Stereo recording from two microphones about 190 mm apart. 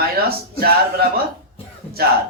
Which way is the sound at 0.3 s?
55° right (ahead or behind).